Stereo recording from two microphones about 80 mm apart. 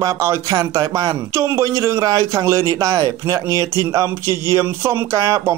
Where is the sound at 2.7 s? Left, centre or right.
Right.